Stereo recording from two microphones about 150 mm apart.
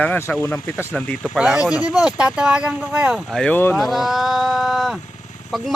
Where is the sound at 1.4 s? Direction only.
5° right (ahead or behind); by 3.8 s 15° left (ahead or behind).